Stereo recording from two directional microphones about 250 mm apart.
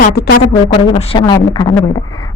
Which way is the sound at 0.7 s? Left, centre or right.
Centre.